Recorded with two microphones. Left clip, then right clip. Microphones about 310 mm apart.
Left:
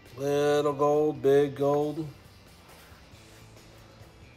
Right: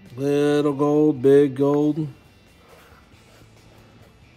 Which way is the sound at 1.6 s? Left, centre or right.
Right.